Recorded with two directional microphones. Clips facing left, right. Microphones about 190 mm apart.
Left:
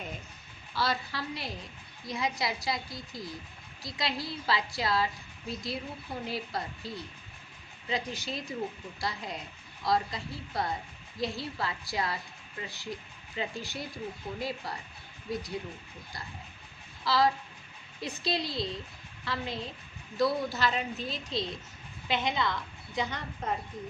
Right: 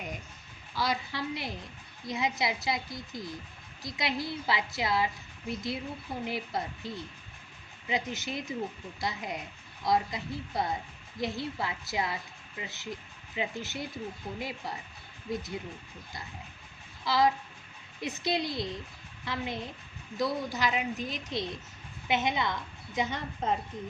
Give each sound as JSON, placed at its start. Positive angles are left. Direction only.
{"t": 0.8, "sound": "a woman's voice", "side_deg": -20}
{"t": 17.0, "sound": "a woman's voice", "side_deg": -20}